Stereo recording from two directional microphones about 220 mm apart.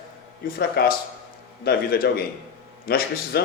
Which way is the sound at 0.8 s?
45° left (ahead or behind).